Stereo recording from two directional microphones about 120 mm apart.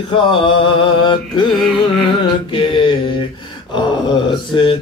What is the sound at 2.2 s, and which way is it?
Mantra, 45° left (ahead or behind).